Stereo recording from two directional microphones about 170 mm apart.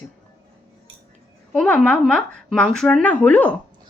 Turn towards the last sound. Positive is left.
turn(degrees=10)  # may be behind; listen again after turning